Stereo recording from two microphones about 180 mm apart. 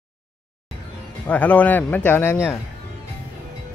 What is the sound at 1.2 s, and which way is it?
Speech, 10° left (ahead or behind).